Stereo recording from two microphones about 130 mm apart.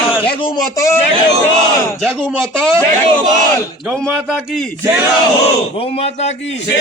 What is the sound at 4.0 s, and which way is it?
Speech, 5° left (ahead or behind).